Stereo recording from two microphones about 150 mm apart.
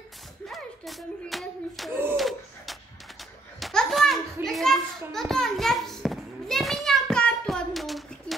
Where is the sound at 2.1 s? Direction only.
Centre (ahead or behind).